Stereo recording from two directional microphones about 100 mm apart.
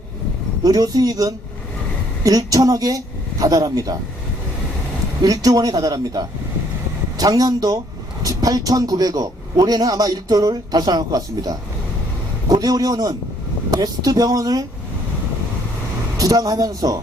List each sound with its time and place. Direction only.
0.6 s a man's voice: 40° right (ahead or behind)
5.2 s a man's voice: 40° right (ahead or behind)
16.1 s a man's voice: 40° right (ahead or behind)